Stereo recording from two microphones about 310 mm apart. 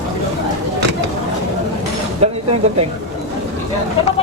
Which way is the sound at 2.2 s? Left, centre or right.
Centre.